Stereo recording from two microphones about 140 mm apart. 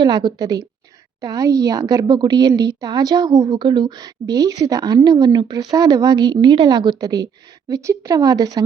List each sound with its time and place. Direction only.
0.0 s a woman's voice: 35° right (ahead or behind)